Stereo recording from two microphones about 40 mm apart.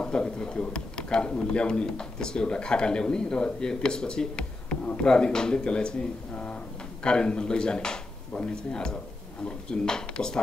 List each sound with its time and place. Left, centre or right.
0.0 s a man's voice: left
5.1 s speech: centre